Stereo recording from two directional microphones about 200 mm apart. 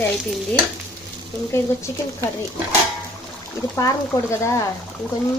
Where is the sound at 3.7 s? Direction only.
15° left (ahead or behind).